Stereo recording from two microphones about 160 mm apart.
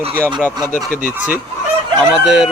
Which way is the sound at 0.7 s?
55° left (ahead or behind).